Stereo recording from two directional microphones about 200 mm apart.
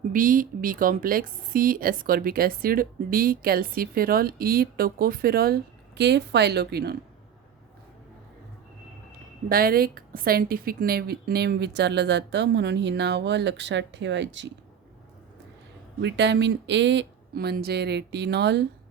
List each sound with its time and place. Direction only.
0.1 s a woman's voice: 45° right (ahead or behind)
9.5 s a woman's voice: 50° right (ahead or behind); by 14.5 s 65° right (ahead or behind)
16.0 s a woman's voice: 60° right (ahead or behind)